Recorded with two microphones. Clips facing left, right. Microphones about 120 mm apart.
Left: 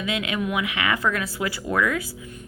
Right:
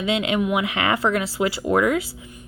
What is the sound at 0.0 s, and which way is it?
Speech, 30° right (ahead or behind).